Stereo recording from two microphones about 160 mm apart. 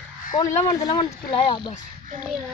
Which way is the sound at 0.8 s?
30° left (ahead or behind).